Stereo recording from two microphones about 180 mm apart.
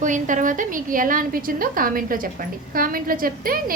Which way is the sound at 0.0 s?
45° right (ahead or behind).